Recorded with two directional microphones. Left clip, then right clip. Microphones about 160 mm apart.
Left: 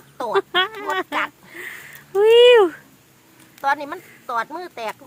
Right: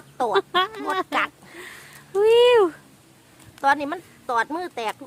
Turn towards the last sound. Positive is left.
turn(degrees=-50)  # may be behind; listen again after turning